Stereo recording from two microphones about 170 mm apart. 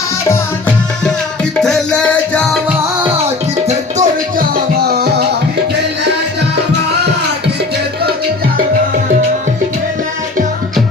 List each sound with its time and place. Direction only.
1.6 s music: 5° left (ahead or behind)
3.7 s music: 45° right (ahead or behind)